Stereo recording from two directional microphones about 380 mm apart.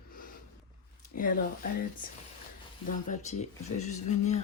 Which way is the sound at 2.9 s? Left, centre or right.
Centre.